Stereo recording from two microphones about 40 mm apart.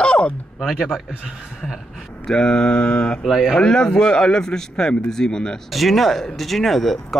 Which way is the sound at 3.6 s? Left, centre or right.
Centre.